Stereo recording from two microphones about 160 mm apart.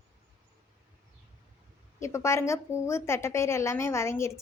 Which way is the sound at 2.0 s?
15° left (ahead or behind).